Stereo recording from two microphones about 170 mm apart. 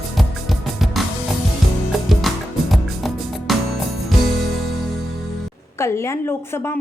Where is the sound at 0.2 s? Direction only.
Centre (ahead or behind).